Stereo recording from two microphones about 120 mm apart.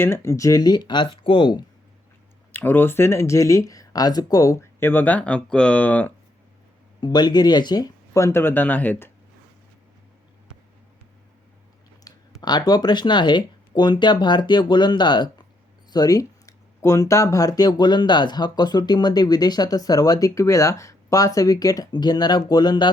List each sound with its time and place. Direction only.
0.0 s speech: 20° left (ahead or behind); by 1.6 s 40° left (ahead or behind)
2.5 s speech: 15° left (ahead or behind)
7.0 s speech: 35° left (ahead or behind); by 9.1 s 15° left (ahead or behind)
12.1 s a sound: 30° left (ahead or behind)
12.4 s speech: 35° left (ahead or behind)